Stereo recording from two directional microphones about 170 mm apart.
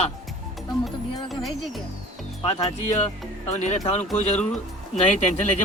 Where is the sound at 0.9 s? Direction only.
Centre (ahead or behind).